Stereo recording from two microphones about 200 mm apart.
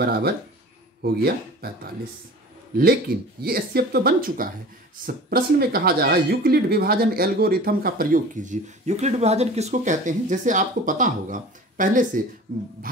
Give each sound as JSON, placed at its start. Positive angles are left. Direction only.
{"t": 0.0, "sound": "speech", "side_deg": -50}
{"t": 3.4, "sound": "a woman's voice", "side_deg": -50}
{"t": 12.9, "sound": "music", "side_deg": -45}